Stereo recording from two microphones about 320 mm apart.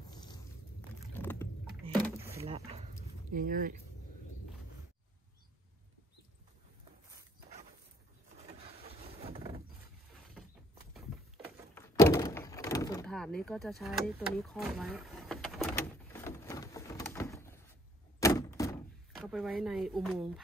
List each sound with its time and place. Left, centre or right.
0.1 s a sound: centre
1.1 s rowboat: centre
2.0 s a sound: centre
9.0 s boat: centre
11.4 s door: centre
19.1 s speech: centre